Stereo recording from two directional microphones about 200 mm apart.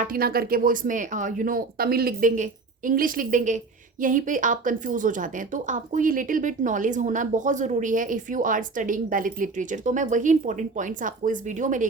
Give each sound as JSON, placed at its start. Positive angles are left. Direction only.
{"t": 0.0, "sound": "speech", "side_deg": -45}